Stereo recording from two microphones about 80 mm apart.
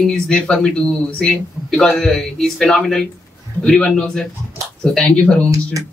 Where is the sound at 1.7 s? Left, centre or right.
Centre.